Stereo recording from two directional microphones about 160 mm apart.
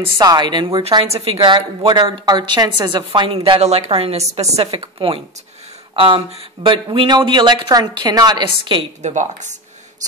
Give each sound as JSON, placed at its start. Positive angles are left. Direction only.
{"t": 0.2, "sound": "speech", "side_deg": -25}
{"t": 1.0, "sound": "a woman's voice", "side_deg": -40}
{"t": 9.0, "sound": "speech", "side_deg": -50}